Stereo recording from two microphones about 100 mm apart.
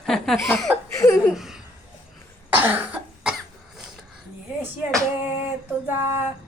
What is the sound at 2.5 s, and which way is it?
Cough, 20° right (ahead or behind).